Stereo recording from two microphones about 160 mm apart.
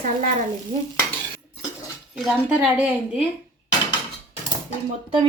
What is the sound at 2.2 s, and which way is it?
A woman's voice, centre (ahead or behind).